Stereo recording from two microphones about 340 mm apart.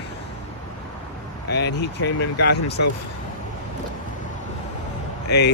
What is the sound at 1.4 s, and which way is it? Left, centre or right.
Speech, left.